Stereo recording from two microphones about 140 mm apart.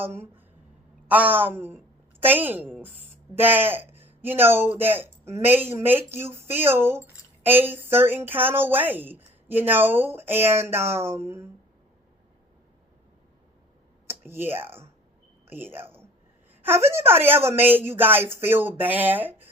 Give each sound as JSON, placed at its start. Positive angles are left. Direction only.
{"t": 0.0, "sound": "speech", "side_deg": -15}
{"t": 14.1, "sound": "speech", "side_deg": -15}